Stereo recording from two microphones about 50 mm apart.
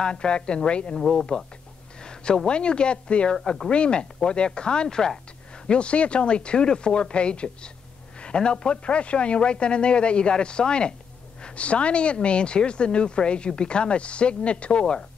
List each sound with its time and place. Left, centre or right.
0.0 s speech: centre
3.3 s speech: centre
5.7 s speech: left